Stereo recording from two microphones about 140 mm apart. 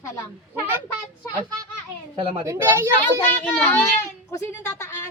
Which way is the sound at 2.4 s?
20° right (ahead or behind).